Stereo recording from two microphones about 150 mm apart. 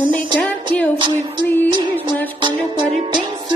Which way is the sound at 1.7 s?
30° right (ahead or behind).